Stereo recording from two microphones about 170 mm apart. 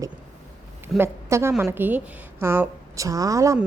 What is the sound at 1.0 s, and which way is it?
A woman's voice, 15° right (ahead or behind).